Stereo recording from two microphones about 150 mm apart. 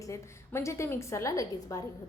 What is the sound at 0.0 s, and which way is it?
A woman's voice, 20° left (ahead or behind).